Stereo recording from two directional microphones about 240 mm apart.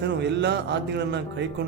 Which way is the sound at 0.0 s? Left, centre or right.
Right.